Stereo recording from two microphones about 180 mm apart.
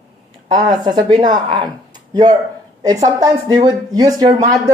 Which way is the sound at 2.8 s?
20° right (ahead or behind).